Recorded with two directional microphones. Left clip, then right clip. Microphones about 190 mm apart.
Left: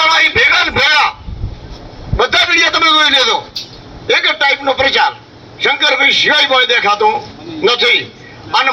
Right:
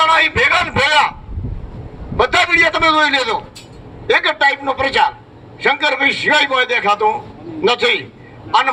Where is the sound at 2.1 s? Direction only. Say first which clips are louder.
Left 2 dB; 30° left (ahead or behind).